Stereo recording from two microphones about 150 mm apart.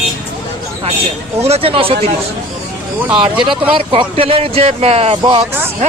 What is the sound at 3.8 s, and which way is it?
Speech, 40° right (ahead or behind).